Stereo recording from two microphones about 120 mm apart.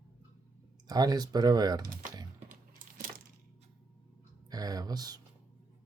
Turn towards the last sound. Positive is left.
turn(degrees=-35)  # may be behind; listen again after turning